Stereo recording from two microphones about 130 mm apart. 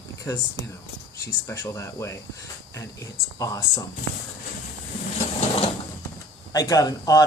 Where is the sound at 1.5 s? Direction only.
25° left (ahead or behind).